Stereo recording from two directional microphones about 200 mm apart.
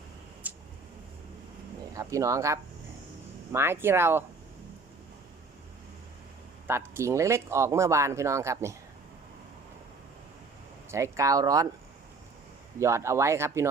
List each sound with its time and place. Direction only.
0.4 s a sound: 10° right (ahead or behind)
1.9 s speech: 15° right (ahead or behind)
6.7 s speech: 10° right (ahead or behind)
10.9 s speech: 15° right (ahead or behind)
12.8 s speech: 15° right (ahead or behind)